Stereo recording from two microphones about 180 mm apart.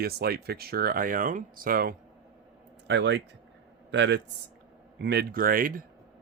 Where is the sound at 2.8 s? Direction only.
85° right; by 5.8 s 50° right (ahead or behind).